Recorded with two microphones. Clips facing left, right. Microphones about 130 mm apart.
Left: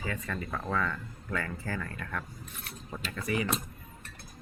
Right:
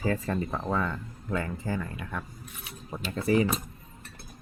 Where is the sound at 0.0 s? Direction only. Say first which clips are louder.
Right 7 dB; 35° right (ahead or behind); by 2.7 s 10° right (ahead or behind).